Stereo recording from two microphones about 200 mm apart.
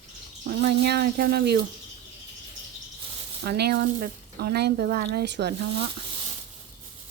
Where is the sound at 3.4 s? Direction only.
55° right (ahead or behind).